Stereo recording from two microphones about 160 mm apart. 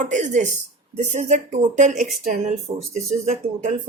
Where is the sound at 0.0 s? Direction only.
50° right (ahead or behind).